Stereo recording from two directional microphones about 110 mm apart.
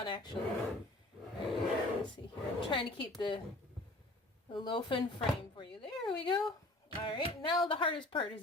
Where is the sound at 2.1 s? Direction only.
45° left (ahead or behind).